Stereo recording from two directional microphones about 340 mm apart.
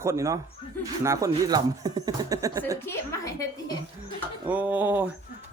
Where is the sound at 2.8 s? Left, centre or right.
Centre.